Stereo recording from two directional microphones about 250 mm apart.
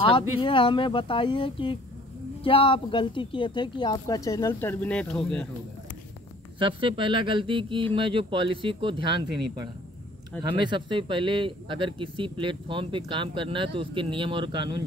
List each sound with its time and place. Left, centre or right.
0.4 s speech: centre
6.6 s speech: centre